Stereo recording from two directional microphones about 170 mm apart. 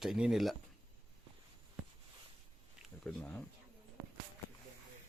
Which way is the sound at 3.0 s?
5° left (ahead or behind).